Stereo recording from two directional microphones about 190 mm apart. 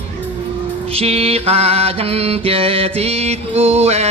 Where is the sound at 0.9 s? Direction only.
30° right (ahead or behind).